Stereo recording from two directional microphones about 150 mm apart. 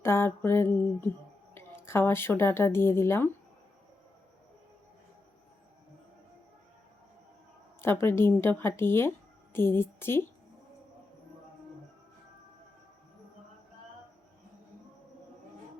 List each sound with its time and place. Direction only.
0.0 s a sound: 15° left (ahead or behind)
1.5 s speech: 15° left (ahead or behind)
7.8 s speech: 15° left (ahead or behind)